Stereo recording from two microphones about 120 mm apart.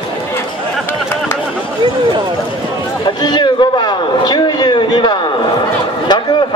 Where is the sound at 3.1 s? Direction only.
35° left (ahead or behind).